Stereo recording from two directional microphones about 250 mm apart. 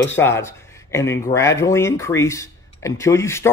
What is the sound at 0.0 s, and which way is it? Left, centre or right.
Speech, centre.